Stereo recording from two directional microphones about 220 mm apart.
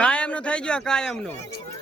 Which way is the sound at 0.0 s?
5° left (ahead or behind).